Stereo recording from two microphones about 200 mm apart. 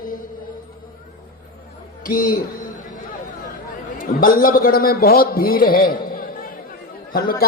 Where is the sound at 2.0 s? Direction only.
45° left (ahead or behind).